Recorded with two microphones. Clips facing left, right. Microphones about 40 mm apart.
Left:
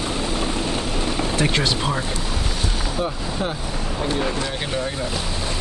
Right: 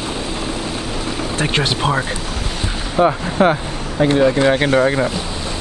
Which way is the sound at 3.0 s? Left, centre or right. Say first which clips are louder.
Right 13 dB; right.